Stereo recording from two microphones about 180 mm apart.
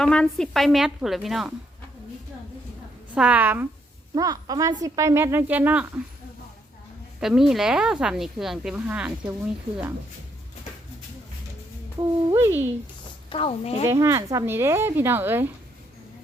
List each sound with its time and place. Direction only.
0.0 s speech: 5° left (ahead or behind)
3.2 s a woman's voice: 10° right (ahead or behind)
4.1 s a woman's voice: 20° right (ahead or behind)
7.2 s speech: centre (ahead or behind)
11.9 s a woman's voice: 15° right (ahead or behind)
13.3 s a woman's voice: 30° left (ahead or behind)
13.8 s a woman's voice: 15° right (ahead or behind)